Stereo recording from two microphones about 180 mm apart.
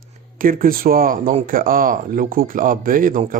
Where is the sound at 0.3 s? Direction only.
50° right (ahead or behind).